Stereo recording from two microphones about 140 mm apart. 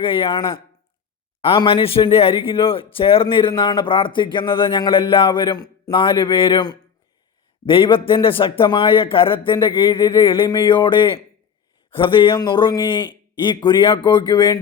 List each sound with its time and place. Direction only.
0.0 s a man's voice: 40° left (ahead or behind)